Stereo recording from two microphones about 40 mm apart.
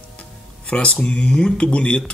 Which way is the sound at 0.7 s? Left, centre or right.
Left.